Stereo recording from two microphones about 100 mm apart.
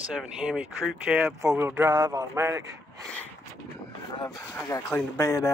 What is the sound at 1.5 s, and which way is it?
Speech, 25° right (ahead or behind).